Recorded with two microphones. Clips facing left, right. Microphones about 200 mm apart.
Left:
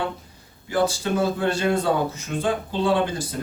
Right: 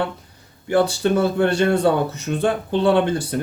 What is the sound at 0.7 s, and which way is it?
Speech, 65° right (ahead or behind).